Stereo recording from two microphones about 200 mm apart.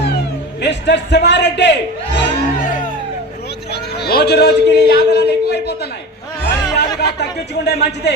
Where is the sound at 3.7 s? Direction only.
55° left (ahead or behind).